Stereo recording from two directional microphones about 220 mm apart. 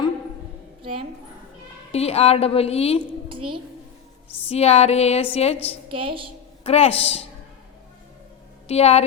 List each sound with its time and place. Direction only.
1.9 s a woman's voice: 30° left (ahead or behind)
3.2 s a sound: 25° right (ahead or behind)
4.4 s a woman's voice: 30° left (ahead or behind)
5.9 s a woman's voice: 25° right (ahead or behind)
6.7 s a woman's voice: 30° left (ahead or behind)
8.6 s a woman's voice: 30° left (ahead or behind)